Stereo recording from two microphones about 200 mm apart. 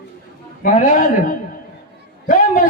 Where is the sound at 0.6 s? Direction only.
45° left (ahead or behind).